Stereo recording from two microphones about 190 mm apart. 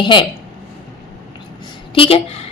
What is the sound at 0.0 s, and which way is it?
Speech, 25° left (ahead or behind).